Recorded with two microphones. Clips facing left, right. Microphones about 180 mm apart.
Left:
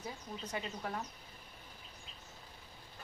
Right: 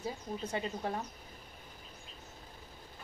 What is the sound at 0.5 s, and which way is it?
Speech, 30° right (ahead or behind).